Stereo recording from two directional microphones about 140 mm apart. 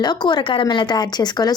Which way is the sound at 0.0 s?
30° left (ahead or behind).